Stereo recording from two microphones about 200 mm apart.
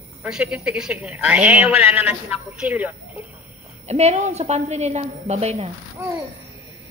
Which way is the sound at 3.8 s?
35° right (ahead or behind).